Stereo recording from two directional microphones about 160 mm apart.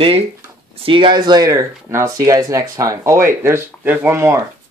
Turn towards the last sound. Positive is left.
turn(degrees=-15)  # may be behind; listen again after turning